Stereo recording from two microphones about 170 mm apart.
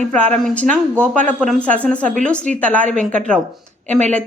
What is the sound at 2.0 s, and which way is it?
Speech, 50° right (ahead or behind).